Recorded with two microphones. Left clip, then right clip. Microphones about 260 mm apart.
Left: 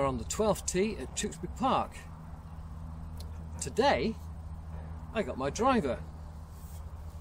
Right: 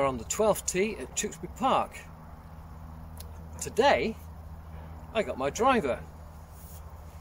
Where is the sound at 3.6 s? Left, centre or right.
Centre.